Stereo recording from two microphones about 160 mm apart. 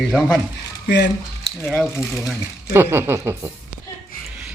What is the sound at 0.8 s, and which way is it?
Speech, 90° left.